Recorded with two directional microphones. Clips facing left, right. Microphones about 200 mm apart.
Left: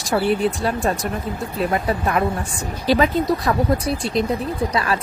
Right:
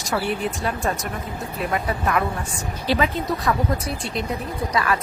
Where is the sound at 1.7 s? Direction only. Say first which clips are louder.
Even; 30° left (ahead or behind).